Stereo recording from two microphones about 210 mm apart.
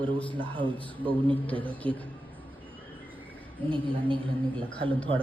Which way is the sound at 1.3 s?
5° left (ahead or behind).